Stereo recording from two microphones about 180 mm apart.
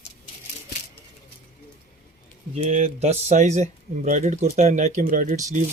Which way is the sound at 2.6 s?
35° right (ahead or behind).